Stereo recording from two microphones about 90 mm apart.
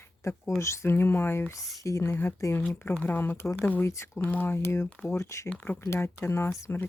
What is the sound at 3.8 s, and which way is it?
Speech, 30° left (ahead or behind).